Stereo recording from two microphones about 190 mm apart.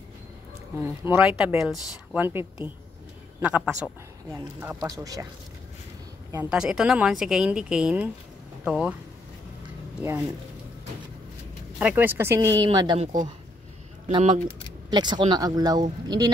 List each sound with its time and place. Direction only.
0.8 s speech: 10° right (ahead or behind)
6.3 s speech: 5° right (ahead or behind)
11.8 s speech: 10° right (ahead or behind)